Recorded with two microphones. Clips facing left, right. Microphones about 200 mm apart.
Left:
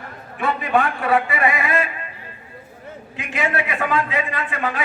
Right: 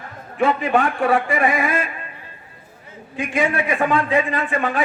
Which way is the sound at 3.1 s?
45° right (ahead or behind).